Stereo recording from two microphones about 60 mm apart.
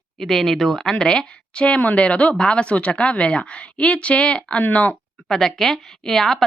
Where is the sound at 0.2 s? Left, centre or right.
Centre; by 4.9 s left.